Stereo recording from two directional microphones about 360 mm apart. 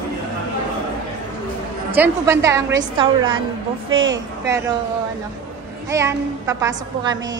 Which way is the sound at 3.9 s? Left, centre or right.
Right.